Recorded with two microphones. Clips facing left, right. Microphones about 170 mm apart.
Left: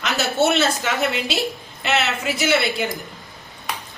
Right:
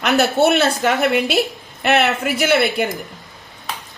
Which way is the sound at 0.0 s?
60° right (ahead or behind).